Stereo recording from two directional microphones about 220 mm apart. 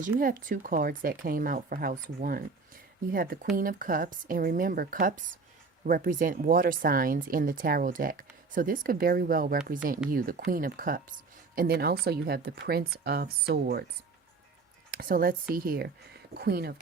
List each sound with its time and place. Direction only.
0.0 s speech: 40° right (ahead or behind)
14.9 s speech: 40° right (ahead or behind)